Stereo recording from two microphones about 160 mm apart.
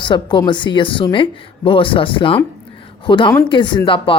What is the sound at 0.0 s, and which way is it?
Speech, 30° left (ahead or behind).